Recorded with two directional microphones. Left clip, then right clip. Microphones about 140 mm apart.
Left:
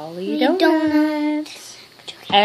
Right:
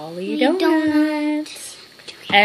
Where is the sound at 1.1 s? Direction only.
Centre (ahead or behind).